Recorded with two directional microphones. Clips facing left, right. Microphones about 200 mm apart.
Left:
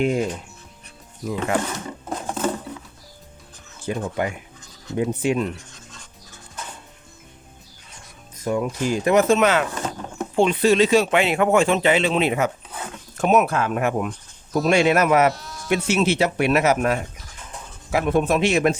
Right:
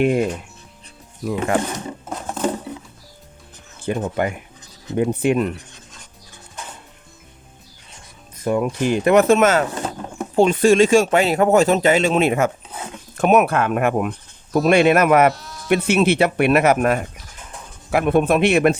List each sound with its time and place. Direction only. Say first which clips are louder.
0.0 s speech: right 4 dB; 60° right (ahead or behind)
2.0 s music: left 4 dB; centre (ahead or behind)
3.9 s speech: right 3 dB; 55° right (ahead or behind)
8.4 s speech: right 3 dB; 55° right (ahead or behind)
13.1 s speech: right 3 dB; 60° right (ahead or behind)
15.3 s sheep: right 2 dB; centre (ahead or behind)
15.9 s speech: right 3 dB; 55° right (ahead or behind)